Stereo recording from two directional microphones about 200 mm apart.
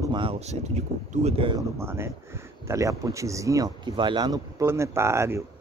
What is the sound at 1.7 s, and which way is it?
Speech, 10° right (ahead or behind).